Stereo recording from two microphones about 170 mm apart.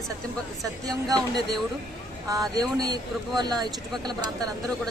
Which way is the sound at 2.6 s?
25° right (ahead or behind).